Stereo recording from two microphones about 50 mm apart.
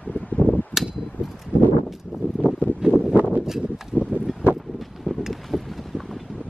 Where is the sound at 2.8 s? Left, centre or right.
Right.